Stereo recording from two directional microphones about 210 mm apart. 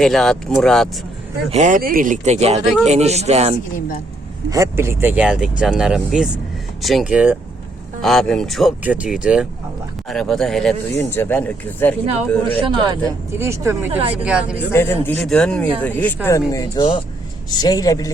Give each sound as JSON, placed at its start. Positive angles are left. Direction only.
{"t": 0.0, "sound": "speech", "side_deg": 0}
{"t": 1.5, "sound": "speech", "side_deg": -35}
{"t": 4.4, "sound": "speech", "side_deg": -15}
{"t": 12.5, "sound": "speech", "side_deg": -20}
{"t": 14.7, "sound": "speech", "side_deg": 10}